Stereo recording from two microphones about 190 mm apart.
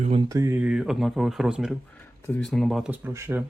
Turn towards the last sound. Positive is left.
turn(degrees=-10)  # may be behind; listen again after turning